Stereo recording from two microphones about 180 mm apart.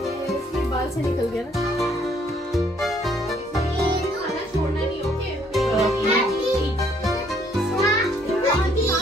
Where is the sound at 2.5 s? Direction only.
Centre (ahead or behind).